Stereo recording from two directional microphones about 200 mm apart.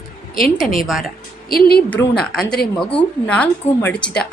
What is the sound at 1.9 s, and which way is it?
Speech, 5° left (ahead or behind).